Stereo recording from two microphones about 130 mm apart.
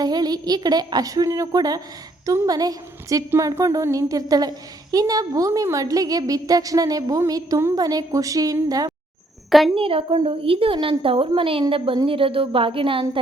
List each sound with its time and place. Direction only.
0.0 s a woman's voice: 30° right (ahead or behind)
9.5 s a woman's voice: centre (ahead or behind)
9.7 s a woman's voice: 45° right (ahead or behind)